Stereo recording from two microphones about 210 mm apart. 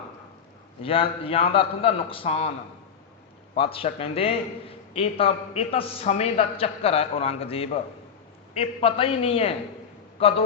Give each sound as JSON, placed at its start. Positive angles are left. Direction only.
{"t": 0.8, "sound": "a man's voice", "side_deg": 25}
{"t": 3.5, "sound": "a man's voice", "side_deg": 25}